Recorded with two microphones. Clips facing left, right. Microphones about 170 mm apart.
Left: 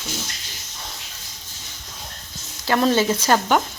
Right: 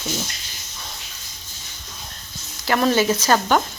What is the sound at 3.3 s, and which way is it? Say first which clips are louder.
Speech: left 1 dB; 10° left (ahead or behind).